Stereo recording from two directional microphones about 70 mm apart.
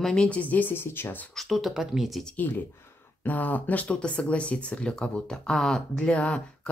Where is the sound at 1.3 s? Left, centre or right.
Centre.